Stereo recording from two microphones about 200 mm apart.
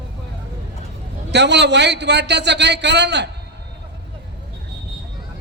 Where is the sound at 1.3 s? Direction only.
60° right (ahead or behind).